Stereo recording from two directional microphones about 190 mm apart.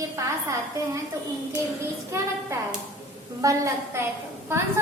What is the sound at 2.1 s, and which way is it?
A woman's voice, 15° right (ahead or behind).